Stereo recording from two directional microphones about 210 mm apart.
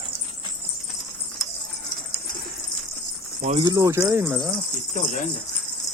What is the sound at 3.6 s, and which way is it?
Speech, 15° right (ahead or behind).